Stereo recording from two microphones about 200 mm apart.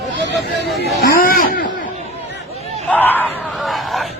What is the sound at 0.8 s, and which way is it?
Chatter, 55° left (ahead or behind).